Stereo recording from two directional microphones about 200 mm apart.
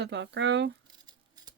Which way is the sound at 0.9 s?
20° right (ahead or behind).